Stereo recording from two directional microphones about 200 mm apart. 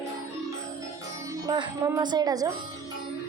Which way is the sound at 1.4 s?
20° right (ahead or behind).